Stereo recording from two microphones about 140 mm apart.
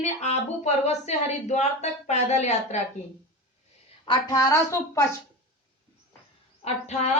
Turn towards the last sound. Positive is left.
turn(degrees=55)  # may be behind; listen again after turning